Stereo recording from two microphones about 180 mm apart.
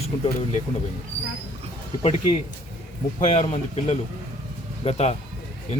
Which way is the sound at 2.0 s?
35° left (ahead or behind).